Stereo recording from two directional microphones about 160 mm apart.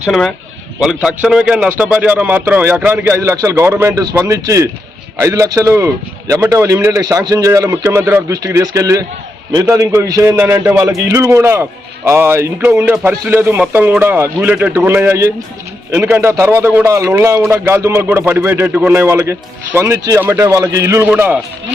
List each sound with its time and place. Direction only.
0.0 s a man's voice: centre (ahead or behind)